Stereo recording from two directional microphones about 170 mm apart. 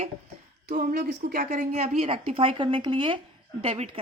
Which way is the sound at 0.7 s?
65° right (ahead or behind).